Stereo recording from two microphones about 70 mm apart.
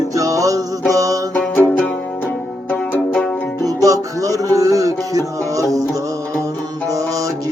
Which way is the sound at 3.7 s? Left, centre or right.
Right.